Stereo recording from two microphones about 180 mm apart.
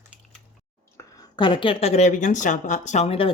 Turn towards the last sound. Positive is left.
turn(degrees=30)  # may be behind; listen again after turning